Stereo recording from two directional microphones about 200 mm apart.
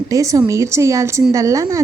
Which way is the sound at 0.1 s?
15° right (ahead or behind).